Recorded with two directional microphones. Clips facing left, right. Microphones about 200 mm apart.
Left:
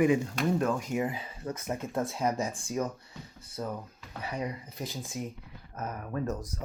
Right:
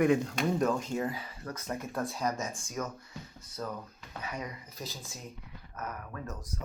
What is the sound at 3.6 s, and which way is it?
Speech, 15° left (ahead or behind).